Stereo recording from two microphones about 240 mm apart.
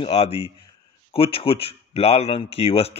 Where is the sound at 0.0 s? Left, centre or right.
Left.